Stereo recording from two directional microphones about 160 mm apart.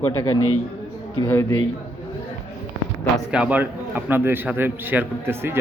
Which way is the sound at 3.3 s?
5° right (ahead or behind).